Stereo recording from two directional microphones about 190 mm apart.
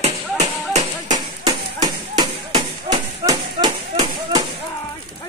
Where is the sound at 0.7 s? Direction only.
35° right (ahead or behind).